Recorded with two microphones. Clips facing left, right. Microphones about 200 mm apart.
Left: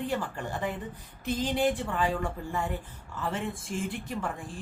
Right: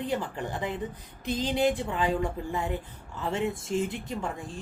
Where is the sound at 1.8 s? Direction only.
20° right (ahead or behind).